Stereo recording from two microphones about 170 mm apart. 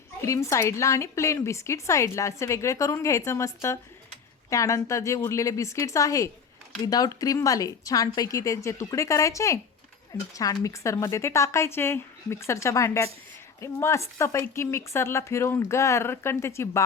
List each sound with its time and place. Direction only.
0.2 s a woman's voice: 15° left (ahead or behind)